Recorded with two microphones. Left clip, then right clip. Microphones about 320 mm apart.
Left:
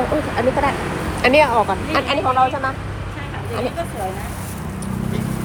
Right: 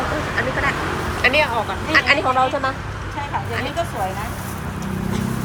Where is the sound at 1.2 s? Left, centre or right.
Centre.